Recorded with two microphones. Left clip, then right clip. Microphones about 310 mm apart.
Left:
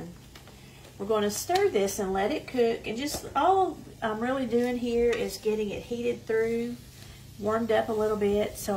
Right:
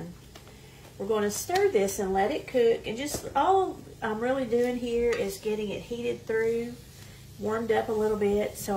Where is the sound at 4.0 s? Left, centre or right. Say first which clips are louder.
Right 1 dB; centre.